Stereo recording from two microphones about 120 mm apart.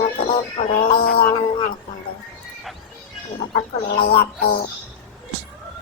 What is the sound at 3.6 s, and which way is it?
Speech, 60° left (ahead or behind).